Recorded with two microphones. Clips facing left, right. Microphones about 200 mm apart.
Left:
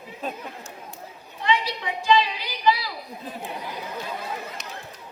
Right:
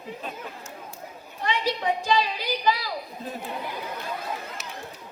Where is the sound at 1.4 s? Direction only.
45° right (ahead or behind).